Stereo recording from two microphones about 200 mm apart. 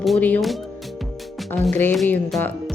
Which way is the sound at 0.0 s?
5° left (ahead or behind).